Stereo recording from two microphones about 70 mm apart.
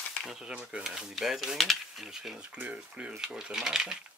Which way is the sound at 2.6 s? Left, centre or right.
Centre.